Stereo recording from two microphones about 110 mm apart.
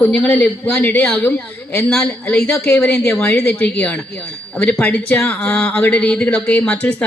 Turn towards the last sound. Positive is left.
turn(degrees=10)  # may be behind; listen again after turning